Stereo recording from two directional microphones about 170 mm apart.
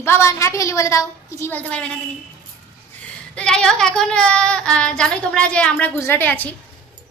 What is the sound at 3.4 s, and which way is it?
Child singing, 5° left (ahead or behind).